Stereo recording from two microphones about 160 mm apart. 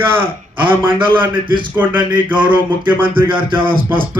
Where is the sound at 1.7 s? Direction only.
10° right (ahead or behind).